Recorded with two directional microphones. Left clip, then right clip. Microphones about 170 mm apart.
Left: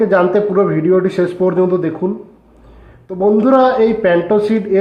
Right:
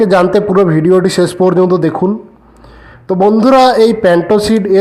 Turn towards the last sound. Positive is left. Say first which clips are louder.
# right 4 dB
turn(degrees=-35)  # may be behind; listen again after turning